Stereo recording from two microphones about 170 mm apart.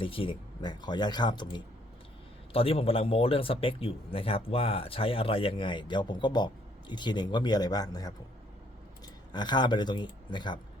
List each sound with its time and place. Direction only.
0.0 s speech: 30° left (ahead or behind)
9.3 s speech: 25° left (ahead or behind)